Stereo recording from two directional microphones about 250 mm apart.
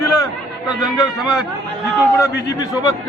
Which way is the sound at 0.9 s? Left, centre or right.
Centre.